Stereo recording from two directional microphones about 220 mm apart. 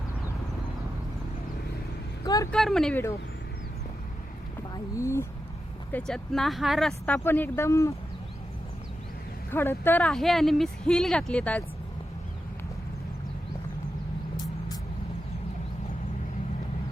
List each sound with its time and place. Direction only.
2.2 s speech: 15° left (ahead or behind)
2.5 s speech: centre (ahead or behind)
4.7 s speech: 15° left (ahead or behind)
9.5 s speech: 10° left (ahead or behind)